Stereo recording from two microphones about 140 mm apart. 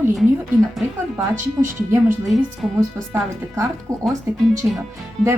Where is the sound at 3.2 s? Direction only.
20° right (ahead or behind).